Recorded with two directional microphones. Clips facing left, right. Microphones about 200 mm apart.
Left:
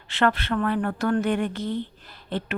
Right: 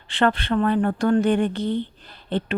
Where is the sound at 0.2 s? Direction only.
30° right (ahead or behind).